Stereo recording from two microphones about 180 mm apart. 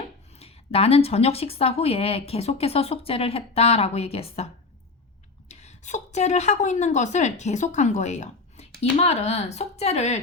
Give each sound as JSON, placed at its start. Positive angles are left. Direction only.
{"t": 0.3, "sound": "a woman's voice", "side_deg": 35}
{"t": 5.5, "sound": "a woman's voice", "side_deg": 40}